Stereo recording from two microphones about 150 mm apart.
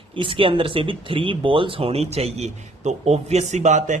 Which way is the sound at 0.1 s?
35° right (ahead or behind).